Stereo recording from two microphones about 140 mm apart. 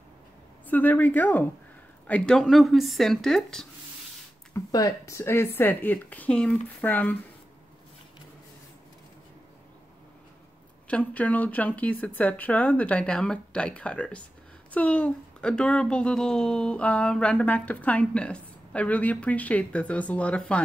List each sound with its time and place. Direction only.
0.7 s speech: 10° left (ahead or behind)
4.6 s speech: 25° left (ahead or behind)
10.9 s speech: 10° left (ahead or behind)